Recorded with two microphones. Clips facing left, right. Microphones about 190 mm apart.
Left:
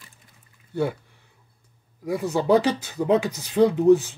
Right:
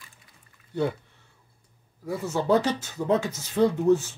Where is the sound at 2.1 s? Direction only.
15° left (ahead or behind).